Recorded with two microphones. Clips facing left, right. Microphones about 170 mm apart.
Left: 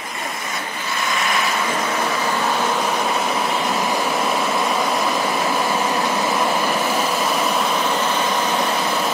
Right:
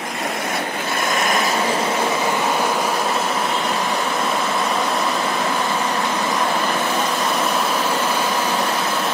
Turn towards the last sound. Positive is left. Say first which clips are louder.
# even
turn(degrees=0)  # may be behind; listen again after turning